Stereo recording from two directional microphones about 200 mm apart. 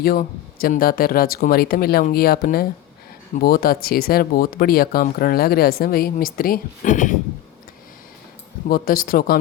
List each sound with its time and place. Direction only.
0.0 s speech: 50° left (ahead or behind)
8.7 s speech: 45° left (ahead or behind)